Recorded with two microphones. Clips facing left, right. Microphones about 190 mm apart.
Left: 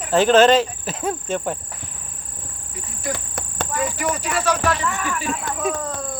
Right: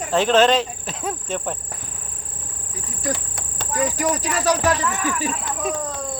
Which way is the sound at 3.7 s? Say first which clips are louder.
Right 3 dB; 40° right (ahead or behind).